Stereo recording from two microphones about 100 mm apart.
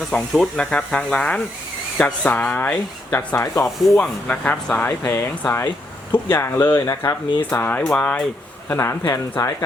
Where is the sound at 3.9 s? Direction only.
10° left (ahead or behind); by 7.2 s 30° left (ahead or behind).